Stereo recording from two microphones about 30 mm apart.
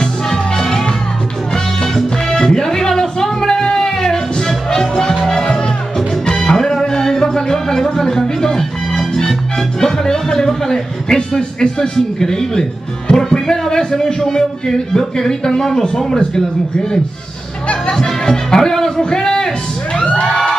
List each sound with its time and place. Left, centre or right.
0.0 s music: centre
2.3 s music: left
9.8 s a man's voice: centre
17.9 s a man's voice: left